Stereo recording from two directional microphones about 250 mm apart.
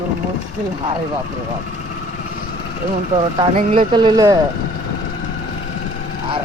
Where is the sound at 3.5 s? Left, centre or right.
Right.